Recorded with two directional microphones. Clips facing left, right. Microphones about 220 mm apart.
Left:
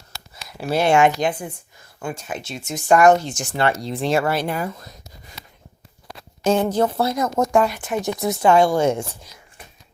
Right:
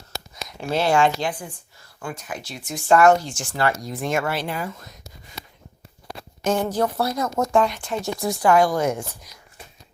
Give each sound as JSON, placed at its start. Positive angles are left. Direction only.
{"t": 0.4, "sound": "a sound", "side_deg": 5}
{"t": 0.8, "sound": "speech", "side_deg": 20}
{"t": 6.4, "sound": "speech", "side_deg": 25}